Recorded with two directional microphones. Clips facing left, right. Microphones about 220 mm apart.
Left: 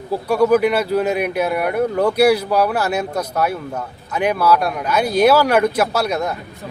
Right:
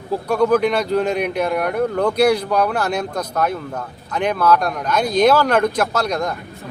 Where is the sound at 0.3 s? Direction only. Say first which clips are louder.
Left 2 dB; 10° left (ahead or behind).